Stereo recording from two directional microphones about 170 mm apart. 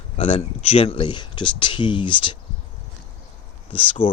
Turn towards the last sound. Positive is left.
turn(degrees=30)  # may be behind; listen again after turning